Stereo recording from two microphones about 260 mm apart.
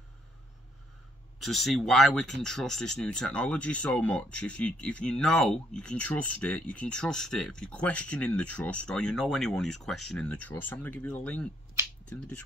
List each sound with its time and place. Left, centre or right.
1.4 s speech: centre
11.8 s finger snapping: centre